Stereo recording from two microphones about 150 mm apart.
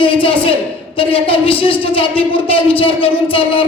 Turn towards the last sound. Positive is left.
turn(degrees=35)  # may be behind; listen again after turning